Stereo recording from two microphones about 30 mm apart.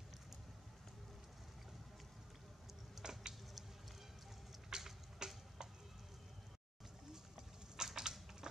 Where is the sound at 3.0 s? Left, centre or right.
Right.